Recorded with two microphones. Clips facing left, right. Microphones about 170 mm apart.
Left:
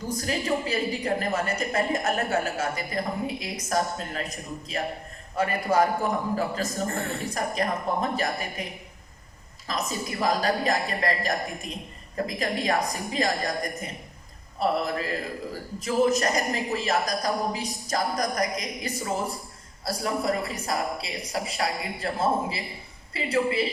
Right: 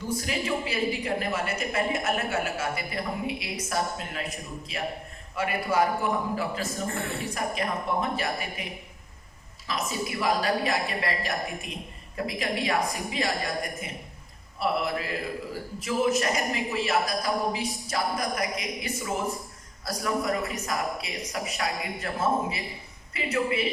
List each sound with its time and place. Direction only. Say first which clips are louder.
0.1 s a woman's voice: left 2 dB; 40° left (ahead or behind)
9.6 s a woman's voice: even; 40° left (ahead or behind)